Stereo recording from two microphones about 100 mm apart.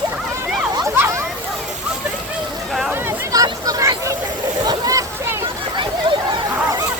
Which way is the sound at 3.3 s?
40° right (ahead or behind).